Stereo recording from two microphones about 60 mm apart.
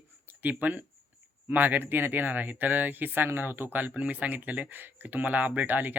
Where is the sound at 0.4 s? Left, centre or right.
Right.